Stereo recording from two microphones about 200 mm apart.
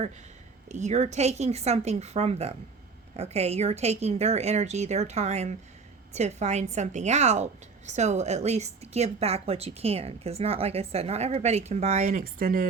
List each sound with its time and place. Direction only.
0.7 s a woman's voice: 35° right (ahead or behind)
12.4 s speech: 45° right (ahead or behind)